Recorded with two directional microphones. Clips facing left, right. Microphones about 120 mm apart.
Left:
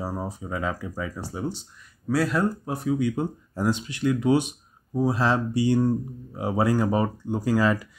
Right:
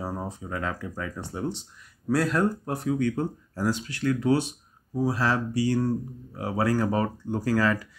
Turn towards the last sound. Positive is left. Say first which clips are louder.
# left 2 dB
turn(degrees=15)  # may be behind; listen again after turning